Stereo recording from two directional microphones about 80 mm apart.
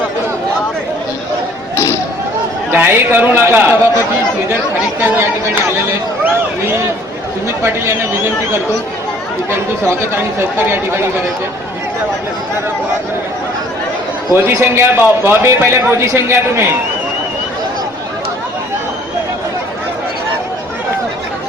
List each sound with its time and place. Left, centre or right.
1.7 s a sound: left
2.7 s a man's voice: right
5.0 s a man's voice: right
7.4 s a man's voice: right
14.3 s a man's voice: right